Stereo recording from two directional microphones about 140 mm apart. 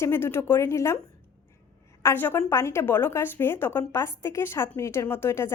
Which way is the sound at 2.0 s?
15° left (ahead or behind).